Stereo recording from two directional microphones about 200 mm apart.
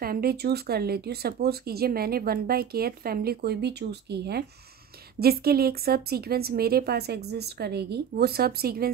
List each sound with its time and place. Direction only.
0.0 s speech: 50° right (ahead or behind)